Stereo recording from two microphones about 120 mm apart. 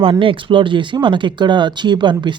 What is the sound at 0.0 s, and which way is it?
Speech, 45° right (ahead or behind).